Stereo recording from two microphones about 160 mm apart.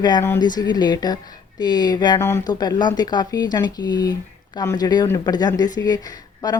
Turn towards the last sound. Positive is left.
turn(degrees=25)  # may be behind; listen again after turning